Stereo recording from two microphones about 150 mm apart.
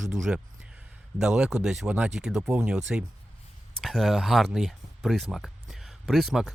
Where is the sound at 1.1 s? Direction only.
5° right (ahead or behind).